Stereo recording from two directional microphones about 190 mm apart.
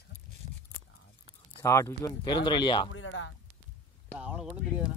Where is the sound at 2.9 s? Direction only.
90° left.